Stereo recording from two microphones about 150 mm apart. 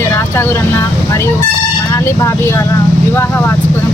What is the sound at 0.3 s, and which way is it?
Speech, 15° left (ahead or behind).